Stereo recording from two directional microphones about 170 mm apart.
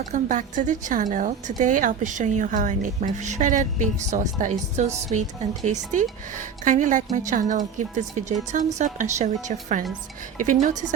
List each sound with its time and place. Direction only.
0.1 s a woman's voice: 45° right (ahead or behind)